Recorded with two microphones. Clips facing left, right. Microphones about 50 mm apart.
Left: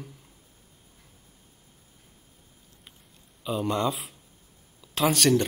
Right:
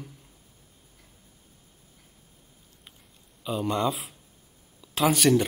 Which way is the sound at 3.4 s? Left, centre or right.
Centre.